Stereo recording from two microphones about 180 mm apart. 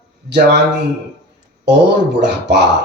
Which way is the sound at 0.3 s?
70° right (ahead or behind).